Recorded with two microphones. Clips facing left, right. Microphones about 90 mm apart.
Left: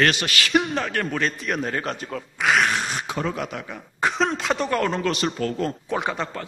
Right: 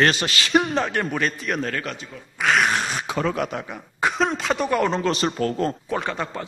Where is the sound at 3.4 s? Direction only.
50° right (ahead or behind).